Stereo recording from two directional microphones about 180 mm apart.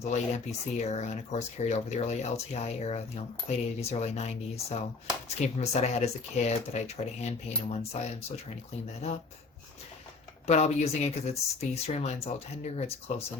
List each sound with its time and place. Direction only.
0.0 s speech: 40° left (ahead or behind)
10.4 s speech: 40° left (ahead or behind)